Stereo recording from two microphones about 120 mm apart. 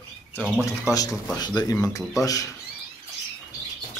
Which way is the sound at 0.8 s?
30° left (ahead or behind).